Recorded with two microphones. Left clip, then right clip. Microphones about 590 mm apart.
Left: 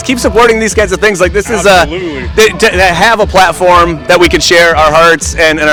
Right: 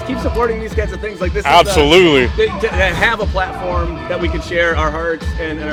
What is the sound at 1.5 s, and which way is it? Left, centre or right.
Speech, right.